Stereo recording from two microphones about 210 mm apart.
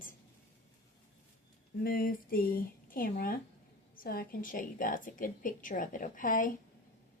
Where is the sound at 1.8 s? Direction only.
45° left (ahead or behind).